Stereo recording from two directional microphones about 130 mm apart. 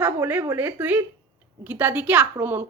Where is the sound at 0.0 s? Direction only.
15° right (ahead or behind).